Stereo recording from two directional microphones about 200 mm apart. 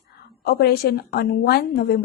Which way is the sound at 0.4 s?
50° left (ahead or behind).